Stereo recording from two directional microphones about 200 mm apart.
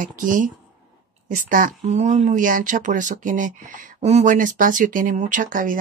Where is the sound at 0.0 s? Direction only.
40° right (ahead or behind).